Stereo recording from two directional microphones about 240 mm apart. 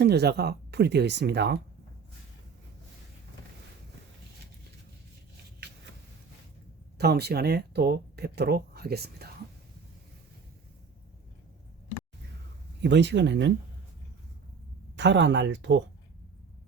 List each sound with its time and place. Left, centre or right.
0.0 s speech: right
7.0 s speech: right
12.8 s speech: right
14.9 s speech: right